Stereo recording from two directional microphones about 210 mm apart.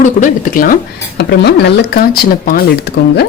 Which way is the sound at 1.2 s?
50° left (ahead or behind).